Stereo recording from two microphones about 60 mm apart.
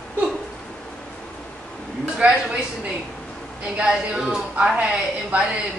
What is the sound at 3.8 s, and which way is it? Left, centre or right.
Speech, centre.